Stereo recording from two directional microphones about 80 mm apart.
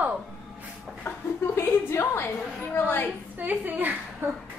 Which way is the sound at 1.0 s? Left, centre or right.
Left.